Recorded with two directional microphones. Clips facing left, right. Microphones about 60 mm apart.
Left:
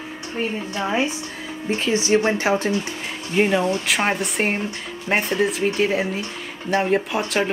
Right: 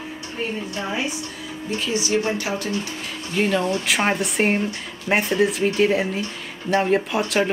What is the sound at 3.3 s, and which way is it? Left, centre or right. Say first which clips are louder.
Speech: left 2 dB; centre.